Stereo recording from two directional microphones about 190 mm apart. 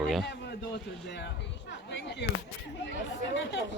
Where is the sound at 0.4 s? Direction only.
65° left (ahead or behind).